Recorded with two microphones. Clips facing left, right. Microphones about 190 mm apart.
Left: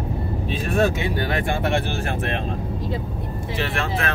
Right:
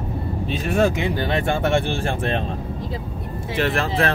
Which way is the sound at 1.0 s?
25° right (ahead or behind).